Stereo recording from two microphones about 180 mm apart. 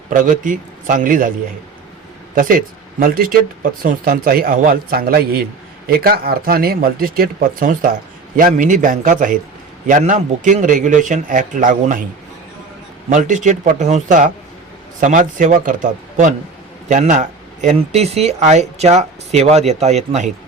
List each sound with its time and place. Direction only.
0.1 s speech: 45° right (ahead or behind)
2.3 s speech: 50° right (ahead or behind)
13.1 s speech: 45° right (ahead or behind)